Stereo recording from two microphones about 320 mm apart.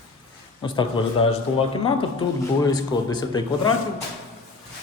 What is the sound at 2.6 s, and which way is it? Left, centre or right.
Speech, centre.